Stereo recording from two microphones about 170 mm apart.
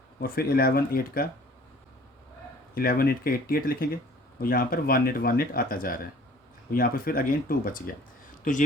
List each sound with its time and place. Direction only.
0.2 s speech: 60° left (ahead or behind)
2.7 s speech: 60° left (ahead or behind)